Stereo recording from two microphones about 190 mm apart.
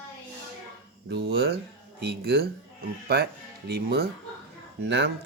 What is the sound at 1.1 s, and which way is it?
Speech, 65° right (ahead or behind).